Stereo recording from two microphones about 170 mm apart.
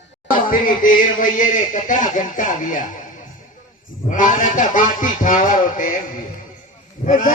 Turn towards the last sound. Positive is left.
turn(degrees=50)  # may be behind; listen again after turning